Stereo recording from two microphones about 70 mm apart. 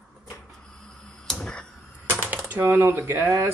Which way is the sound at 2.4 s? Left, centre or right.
Right.